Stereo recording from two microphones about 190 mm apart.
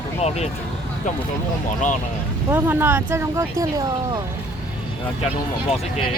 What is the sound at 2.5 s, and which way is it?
Speech, 10° right (ahead or behind).